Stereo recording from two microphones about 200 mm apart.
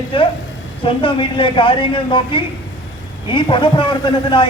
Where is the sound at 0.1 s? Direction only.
25° left (ahead or behind).